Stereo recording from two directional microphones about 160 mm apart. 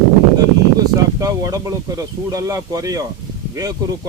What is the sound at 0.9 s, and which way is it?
Speech, 20° right (ahead or behind).